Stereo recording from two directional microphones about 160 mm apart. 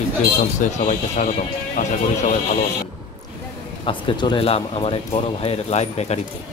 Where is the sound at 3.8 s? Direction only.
30° left (ahead or behind).